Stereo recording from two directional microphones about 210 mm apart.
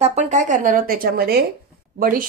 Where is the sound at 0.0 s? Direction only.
35° right (ahead or behind).